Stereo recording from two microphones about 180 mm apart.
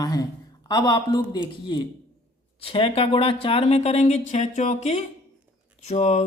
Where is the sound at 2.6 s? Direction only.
30° left (ahead or behind).